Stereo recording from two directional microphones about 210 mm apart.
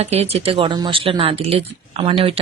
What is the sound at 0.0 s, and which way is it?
Speech, 30° right (ahead or behind).